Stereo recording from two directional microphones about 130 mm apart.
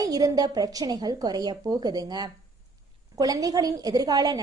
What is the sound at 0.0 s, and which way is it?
A woman's voice, 30° right (ahead or behind).